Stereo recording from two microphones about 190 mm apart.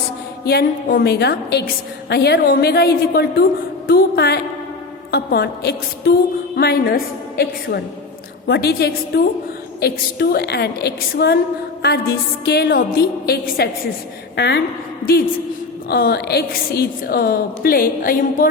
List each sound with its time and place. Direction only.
0.4 s a woman's voice: 50° left (ahead or behind)
15.9 s a woman's voice: 55° left (ahead or behind)